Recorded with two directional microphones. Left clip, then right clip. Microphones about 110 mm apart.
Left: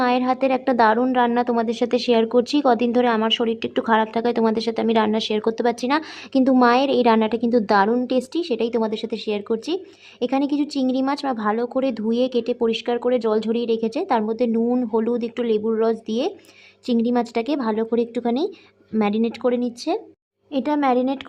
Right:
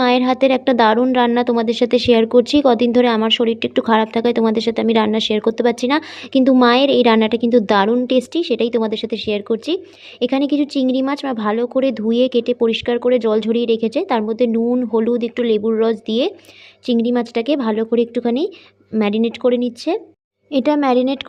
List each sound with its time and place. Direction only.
0.0 s speech: 40° right (ahead or behind)
20.5 s speech: 40° right (ahead or behind)